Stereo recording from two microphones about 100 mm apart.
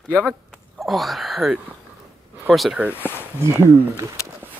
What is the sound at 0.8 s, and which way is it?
Speech, centre (ahead or behind).